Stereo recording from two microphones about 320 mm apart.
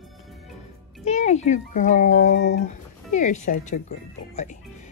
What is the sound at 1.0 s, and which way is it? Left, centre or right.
Speech, left.